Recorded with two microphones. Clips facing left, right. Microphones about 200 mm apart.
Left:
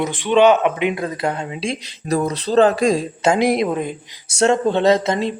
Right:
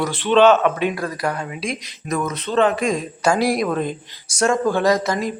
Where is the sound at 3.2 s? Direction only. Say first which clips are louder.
Left 2 dB; 20° left (ahead or behind).